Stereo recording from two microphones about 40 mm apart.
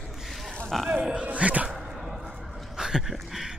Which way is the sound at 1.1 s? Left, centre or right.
Right.